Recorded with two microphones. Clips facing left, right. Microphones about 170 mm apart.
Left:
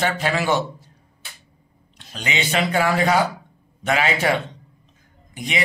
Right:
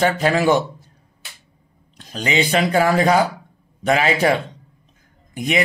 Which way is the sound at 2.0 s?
40° right (ahead or behind).